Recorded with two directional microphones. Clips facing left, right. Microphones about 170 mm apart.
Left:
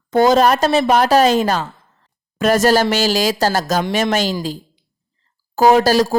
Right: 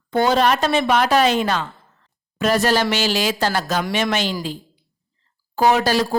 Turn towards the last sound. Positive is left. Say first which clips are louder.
# left 5 dB
turn(degrees=40)  # may be behind; listen again after turning